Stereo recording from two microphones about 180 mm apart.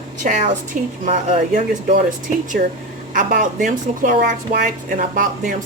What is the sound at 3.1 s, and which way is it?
A woman's voice, 50° right (ahead or behind).